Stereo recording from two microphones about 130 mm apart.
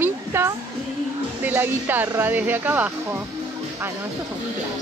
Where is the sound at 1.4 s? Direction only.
15° right (ahead or behind).